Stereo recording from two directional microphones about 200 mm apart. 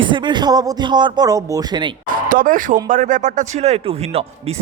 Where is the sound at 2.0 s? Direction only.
40° right (ahead or behind).